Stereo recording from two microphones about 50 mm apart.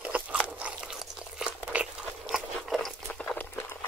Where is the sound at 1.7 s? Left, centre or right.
Right.